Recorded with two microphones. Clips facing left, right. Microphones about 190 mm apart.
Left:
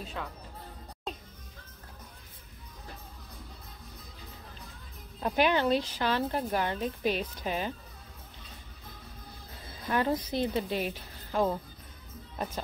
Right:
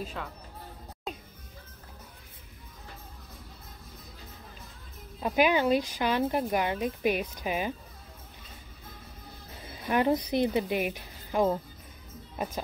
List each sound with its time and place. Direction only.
0.0 s speech: centre (ahead or behind)
5.2 s speech: 5° right (ahead or behind)
9.8 s speech: 15° right (ahead or behind)